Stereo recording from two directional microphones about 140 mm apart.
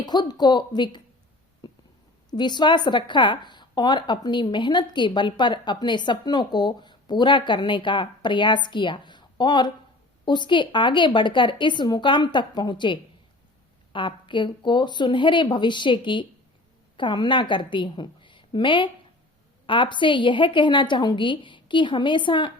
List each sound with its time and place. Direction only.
0.0 s a woman's voice: 30° left (ahead or behind)
1.6 s a sound: 30° left (ahead or behind)
2.3 s a woman's voice: 30° left (ahead or behind)